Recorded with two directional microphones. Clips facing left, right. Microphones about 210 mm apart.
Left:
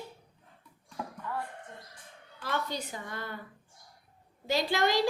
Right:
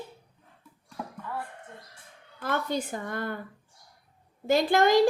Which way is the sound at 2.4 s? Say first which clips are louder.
Right 5 dB; 50° right (ahead or behind).